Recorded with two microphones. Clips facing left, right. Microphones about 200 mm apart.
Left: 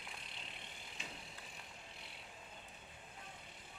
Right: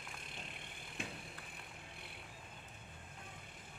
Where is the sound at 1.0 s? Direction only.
55° right (ahead or behind).